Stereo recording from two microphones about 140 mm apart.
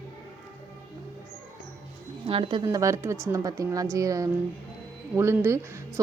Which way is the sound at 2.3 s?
40° right (ahead or behind).